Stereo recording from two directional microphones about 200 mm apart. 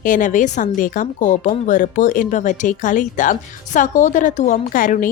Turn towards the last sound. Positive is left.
turn(degrees=45)  # may be behind; listen again after turning